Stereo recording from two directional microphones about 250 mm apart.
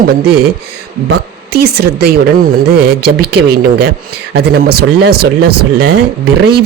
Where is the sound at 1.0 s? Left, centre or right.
Right.